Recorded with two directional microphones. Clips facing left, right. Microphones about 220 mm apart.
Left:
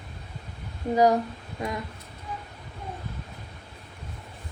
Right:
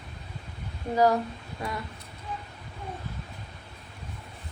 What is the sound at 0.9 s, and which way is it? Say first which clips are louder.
Speech: left 2 dB; 20° left (ahead or behind).